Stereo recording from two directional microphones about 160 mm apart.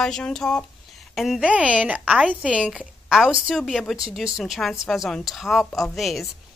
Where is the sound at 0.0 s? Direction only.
5° left (ahead or behind).